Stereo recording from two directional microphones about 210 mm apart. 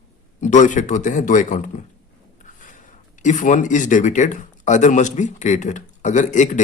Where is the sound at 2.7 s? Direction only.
35° left (ahead or behind).